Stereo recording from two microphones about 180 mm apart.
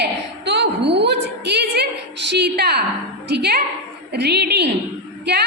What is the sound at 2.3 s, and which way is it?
A woman's voice, 70° right (ahead or behind).